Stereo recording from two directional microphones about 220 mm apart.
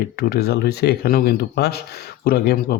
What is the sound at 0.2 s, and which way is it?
Speech, 45° left (ahead or behind).